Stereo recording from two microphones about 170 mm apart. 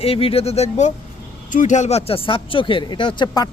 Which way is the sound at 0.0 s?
35° left (ahead or behind).